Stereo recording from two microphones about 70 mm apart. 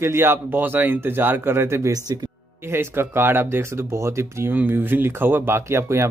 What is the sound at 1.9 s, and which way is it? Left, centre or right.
Speech, right.